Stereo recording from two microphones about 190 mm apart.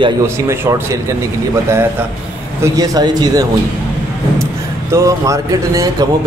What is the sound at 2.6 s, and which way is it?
Speech, 20° right (ahead or behind).